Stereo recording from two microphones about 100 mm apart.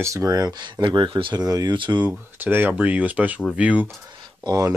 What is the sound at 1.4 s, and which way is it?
Speech, 40° right (ahead or behind).